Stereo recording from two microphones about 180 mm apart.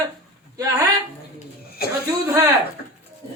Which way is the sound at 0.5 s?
20° right (ahead or behind).